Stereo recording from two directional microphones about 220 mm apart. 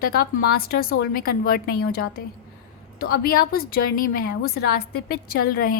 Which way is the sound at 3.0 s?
45° left (ahead or behind).